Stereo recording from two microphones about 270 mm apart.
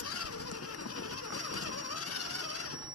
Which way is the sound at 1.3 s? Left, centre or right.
Left.